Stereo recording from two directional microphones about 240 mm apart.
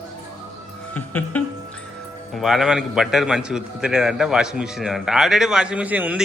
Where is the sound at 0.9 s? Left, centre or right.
Centre.